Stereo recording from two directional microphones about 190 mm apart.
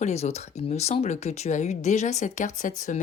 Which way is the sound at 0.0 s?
35° left (ahead or behind).